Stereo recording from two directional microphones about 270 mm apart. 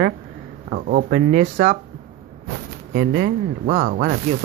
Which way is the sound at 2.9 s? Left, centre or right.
Right.